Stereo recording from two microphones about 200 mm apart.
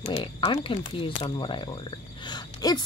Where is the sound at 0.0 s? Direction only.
30° left (ahead or behind).